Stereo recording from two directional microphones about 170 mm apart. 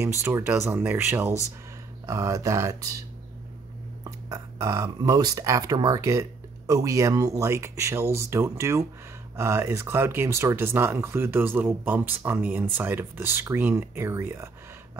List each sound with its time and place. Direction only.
0.0 s speech: 15° right (ahead or behind)
4.0 s speech: 20° right (ahead or behind)